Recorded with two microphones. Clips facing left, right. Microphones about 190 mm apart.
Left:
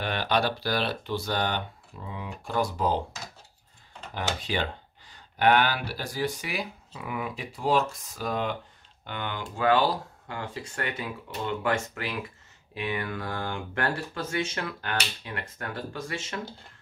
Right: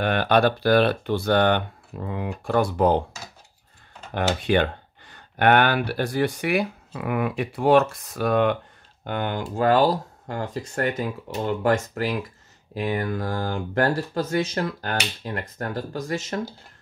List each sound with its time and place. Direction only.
0.0 s speech: 55° right (ahead or behind)
4.1 s speech: 60° right (ahead or behind)
9.0 s speech: 45° right (ahead or behind)